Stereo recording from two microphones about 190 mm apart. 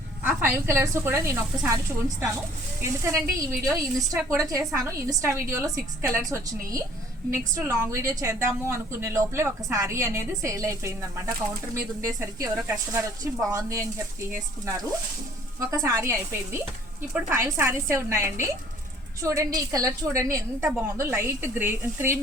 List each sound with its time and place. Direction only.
0.2 s a woman's voice: 10° right (ahead or behind)
15.6 s a woman's voice: 15° right (ahead or behind)